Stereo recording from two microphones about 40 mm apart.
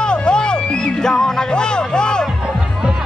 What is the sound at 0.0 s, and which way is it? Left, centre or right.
Music, left.